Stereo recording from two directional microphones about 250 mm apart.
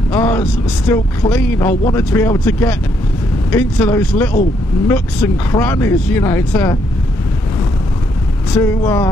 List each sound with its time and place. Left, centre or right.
0.1 s speech: centre
8.5 s speech: centre